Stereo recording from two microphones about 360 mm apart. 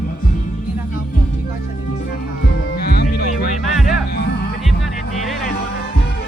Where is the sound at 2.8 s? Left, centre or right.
Left.